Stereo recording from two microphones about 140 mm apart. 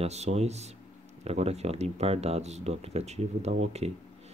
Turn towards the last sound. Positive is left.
turn(degrees=-50)  # may be behind; listen again after turning